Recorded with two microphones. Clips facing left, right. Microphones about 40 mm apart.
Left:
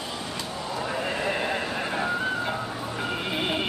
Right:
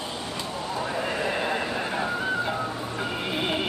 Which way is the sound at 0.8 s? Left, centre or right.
Centre.